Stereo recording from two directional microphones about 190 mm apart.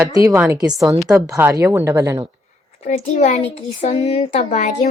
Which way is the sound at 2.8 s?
40° left (ahead or behind).